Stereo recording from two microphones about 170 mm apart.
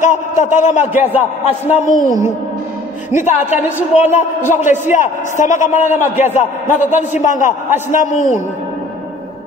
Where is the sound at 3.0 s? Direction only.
45° left (ahead or behind).